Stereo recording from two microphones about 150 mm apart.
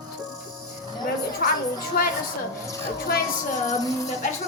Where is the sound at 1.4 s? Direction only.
75° left (ahead or behind).